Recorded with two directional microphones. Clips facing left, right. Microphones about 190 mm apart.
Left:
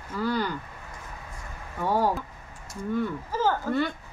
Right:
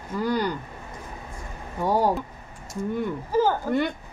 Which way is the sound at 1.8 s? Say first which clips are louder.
Right 3 dB; 15° right (ahead or behind).